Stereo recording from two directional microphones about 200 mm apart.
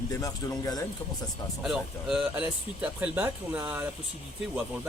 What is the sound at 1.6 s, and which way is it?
Speech, centre (ahead or behind).